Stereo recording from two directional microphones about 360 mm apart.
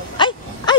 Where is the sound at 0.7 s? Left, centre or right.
Centre.